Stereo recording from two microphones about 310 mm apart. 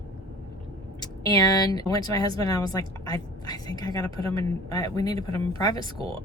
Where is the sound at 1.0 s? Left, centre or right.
Centre.